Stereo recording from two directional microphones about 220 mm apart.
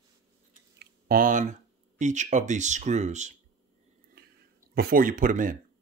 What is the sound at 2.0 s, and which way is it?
Speech, 35° right (ahead or behind).